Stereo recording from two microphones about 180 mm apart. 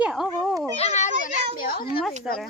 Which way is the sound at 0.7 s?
35° left (ahead or behind).